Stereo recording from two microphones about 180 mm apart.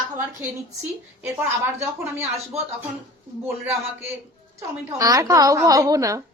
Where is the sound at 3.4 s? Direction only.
15° right (ahead or behind).